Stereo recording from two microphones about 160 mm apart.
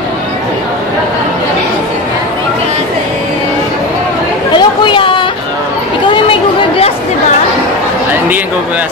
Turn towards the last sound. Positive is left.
turn(degrees=35)  # may be behind; listen again after turning